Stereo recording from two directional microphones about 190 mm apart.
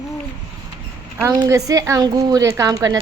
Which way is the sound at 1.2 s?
20° right (ahead or behind).